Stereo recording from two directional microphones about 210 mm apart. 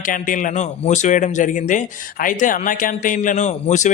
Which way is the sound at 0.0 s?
40° left (ahead or behind).